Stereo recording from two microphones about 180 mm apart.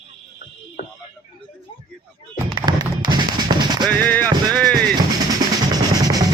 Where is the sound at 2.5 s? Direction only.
25° right (ahead or behind).